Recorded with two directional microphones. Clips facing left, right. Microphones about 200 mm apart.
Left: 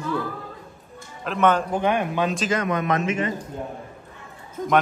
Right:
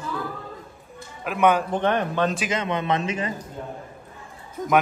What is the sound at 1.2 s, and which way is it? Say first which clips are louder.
Speech: even; 10° right (ahead or behind).